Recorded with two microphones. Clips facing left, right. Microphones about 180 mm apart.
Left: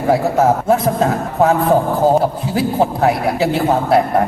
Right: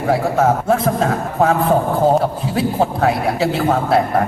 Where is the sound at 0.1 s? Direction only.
25° left (ahead or behind).